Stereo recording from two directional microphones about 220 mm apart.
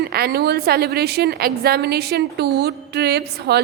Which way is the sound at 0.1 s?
45° right (ahead or behind).